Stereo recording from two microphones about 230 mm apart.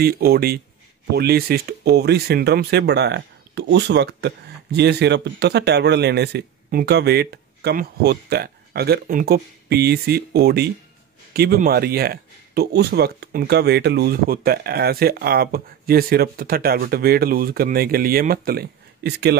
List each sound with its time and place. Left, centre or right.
0.0 s speech: right